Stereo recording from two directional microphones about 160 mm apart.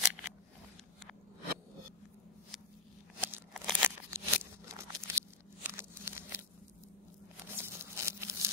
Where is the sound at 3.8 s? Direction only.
10° right (ahead or behind).